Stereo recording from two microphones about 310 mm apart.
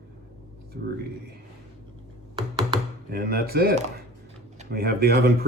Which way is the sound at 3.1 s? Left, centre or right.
Right.